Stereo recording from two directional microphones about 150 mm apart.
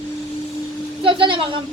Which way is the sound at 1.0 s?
35° right (ahead or behind).